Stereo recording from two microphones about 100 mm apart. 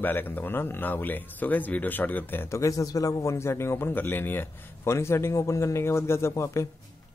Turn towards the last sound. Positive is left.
turn(degrees=30)  # may be behind; listen again after turning